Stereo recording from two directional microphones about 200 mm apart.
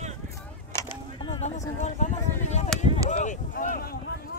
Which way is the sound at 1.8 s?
35° left (ahead or behind).